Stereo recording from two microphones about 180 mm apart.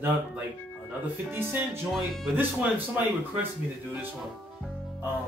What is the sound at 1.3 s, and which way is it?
Speech, 10° right (ahead or behind).